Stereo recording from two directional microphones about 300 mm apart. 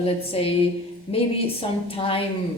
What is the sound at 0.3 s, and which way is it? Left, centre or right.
A woman's voice, centre.